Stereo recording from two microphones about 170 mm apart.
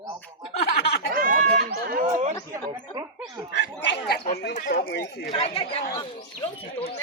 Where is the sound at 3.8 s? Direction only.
90° left.